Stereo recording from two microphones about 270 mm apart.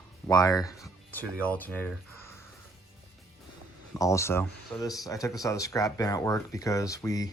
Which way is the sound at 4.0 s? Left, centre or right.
Centre.